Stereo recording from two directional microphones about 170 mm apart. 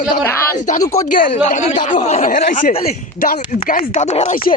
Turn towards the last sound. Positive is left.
turn(degrees=55)  # may be behind; listen again after turning